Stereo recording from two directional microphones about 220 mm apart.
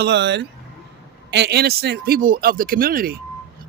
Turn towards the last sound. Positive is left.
turn(degrees=-40)  # may be behind; listen again after turning